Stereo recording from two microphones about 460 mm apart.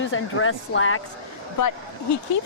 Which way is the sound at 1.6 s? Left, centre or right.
Left.